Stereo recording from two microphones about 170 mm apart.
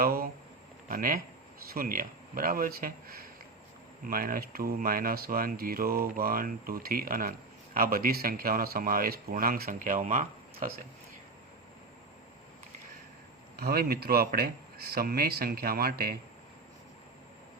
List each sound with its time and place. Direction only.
0.0 s speech: 60° right (ahead or behind)
13.6 s speech: 65° right (ahead or behind)